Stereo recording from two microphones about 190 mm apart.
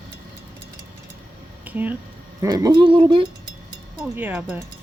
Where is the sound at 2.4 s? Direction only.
20° right (ahead or behind).